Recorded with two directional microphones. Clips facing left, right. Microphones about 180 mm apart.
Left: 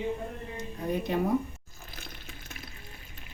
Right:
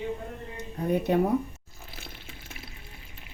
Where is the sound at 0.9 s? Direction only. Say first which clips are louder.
Right 5 dB; 60° right (ahead or behind).